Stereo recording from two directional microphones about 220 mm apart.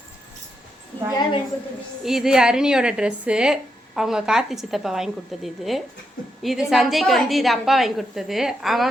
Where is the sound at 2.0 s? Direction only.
Centre (ahead or behind).